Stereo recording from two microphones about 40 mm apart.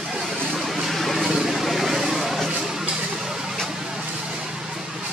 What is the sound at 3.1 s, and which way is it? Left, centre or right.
Vehicle, centre.